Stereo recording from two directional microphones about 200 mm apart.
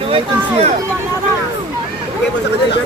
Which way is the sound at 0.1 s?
30° right (ahead or behind).